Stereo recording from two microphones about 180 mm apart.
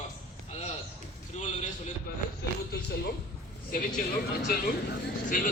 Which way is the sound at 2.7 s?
60° left (ahead or behind).